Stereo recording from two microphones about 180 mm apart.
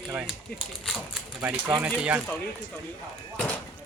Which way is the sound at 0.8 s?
5° right (ahead or behind).